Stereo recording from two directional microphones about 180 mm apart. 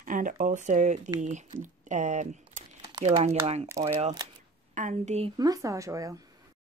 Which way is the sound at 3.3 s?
35° right (ahead or behind).